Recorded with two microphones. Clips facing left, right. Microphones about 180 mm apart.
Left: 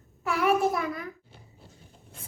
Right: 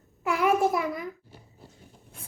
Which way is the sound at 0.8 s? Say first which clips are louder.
Right 2 dB; 15° right (ahead or behind).